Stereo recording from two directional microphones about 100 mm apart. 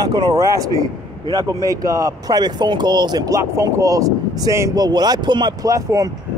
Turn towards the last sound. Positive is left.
turn(degrees=-35)  # may be behind; listen again after turning